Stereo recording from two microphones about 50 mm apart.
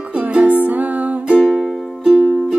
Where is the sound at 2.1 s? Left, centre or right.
Centre.